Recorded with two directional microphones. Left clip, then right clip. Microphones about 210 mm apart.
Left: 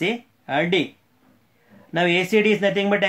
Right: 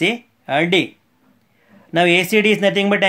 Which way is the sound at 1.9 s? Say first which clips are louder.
Right 5 dB; 40° right (ahead or behind).